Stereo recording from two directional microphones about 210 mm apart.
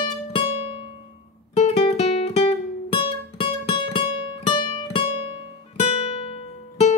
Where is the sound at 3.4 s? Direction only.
25° left (ahead or behind).